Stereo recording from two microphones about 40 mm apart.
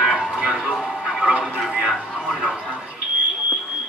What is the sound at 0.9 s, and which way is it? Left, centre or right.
Music, right.